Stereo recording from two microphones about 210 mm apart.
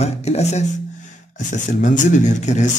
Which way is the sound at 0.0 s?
30° left (ahead or behind).